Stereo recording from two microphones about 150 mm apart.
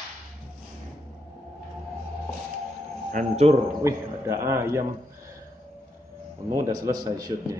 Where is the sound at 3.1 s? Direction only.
50° right (ahead or behind).